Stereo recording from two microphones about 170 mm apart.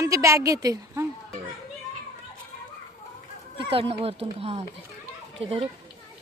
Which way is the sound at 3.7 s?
30° right (ahead or behind).